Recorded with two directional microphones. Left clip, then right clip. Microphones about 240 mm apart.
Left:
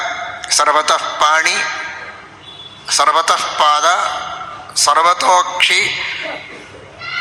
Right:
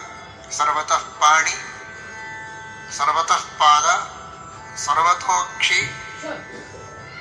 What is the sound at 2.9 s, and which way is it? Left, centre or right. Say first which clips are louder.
A man's voice: left 6 dB; left.